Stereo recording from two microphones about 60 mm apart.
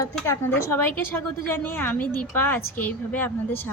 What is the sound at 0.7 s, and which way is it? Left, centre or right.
A woman's voice, left.